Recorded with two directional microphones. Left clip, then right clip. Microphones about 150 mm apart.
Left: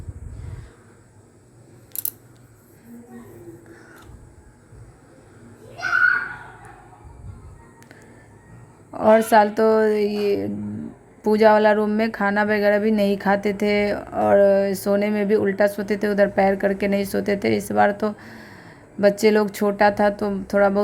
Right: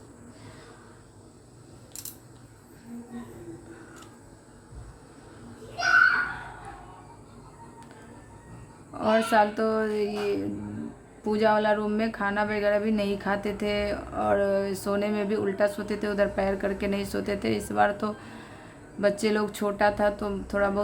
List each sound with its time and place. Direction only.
8.9 s speech: 40° left (ahead or behind)